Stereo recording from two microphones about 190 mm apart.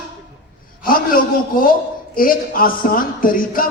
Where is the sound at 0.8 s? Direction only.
50° left (ahead or behind).